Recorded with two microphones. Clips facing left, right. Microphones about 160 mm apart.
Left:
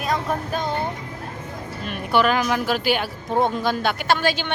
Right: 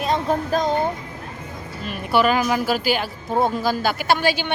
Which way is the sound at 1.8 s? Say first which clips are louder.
Right 1 dB; centre (ahead or behind).